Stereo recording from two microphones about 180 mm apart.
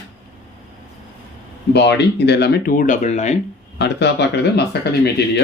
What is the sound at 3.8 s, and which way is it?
Speech, 70° left (ahead or behind).